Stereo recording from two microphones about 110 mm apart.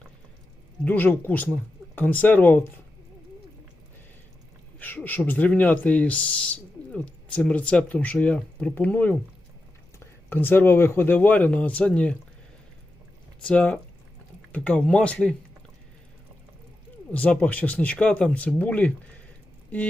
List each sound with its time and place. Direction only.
0.9 s speech: 20° left (ahead or behind)
4.8 s speech: 15° left (ahead or behind)
10.2 s speech: 20° left (ahead or behind)
13.4 s speech: 10° left (ahead or behind)
17.1 s speech: 15° left (ahead or behind)